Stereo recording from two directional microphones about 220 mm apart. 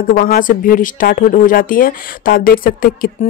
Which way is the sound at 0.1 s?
40° left (ahead or behind).